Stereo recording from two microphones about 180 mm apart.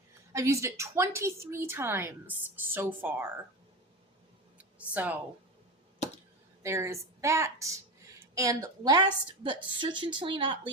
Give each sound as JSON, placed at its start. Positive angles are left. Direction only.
{"t": 0.3, "sound": "a woman's voice", "side_deg": -15}
{"t": 4.5, "sound": "a sound", "side_deg": -10}
{"t": 6.6, "sound": "a woman's voice", "side_deg": -15}